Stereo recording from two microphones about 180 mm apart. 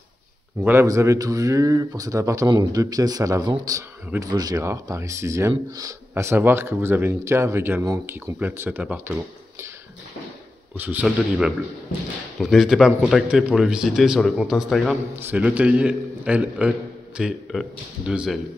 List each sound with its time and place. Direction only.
0.7 s speech: 15° right (ahead or behind)
10.8 s a man's voice: 10° right (ahead or behind)